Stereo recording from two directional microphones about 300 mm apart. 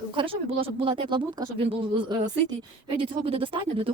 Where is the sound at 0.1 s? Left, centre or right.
Centre.